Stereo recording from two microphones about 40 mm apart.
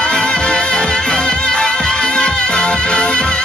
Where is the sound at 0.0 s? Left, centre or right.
Left.